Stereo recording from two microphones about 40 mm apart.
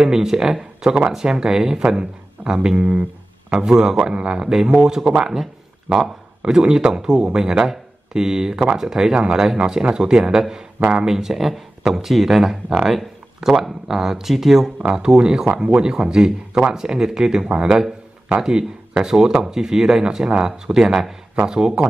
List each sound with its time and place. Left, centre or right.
0.0 s speech: centre
2.8 s a sound: right
3.5 s speech: centre
14.8 s speech: centre